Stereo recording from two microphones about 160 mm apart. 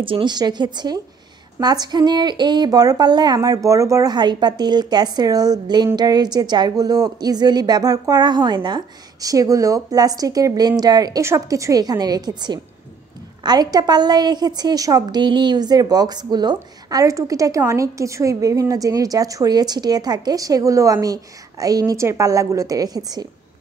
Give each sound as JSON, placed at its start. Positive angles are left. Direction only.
{"t": 0.0, "sound": "a woman's voice", "side_deg": -30}